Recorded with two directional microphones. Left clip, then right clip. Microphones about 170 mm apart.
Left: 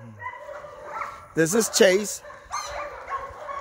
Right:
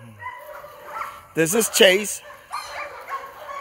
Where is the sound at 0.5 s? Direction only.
25° right (ahead or behind).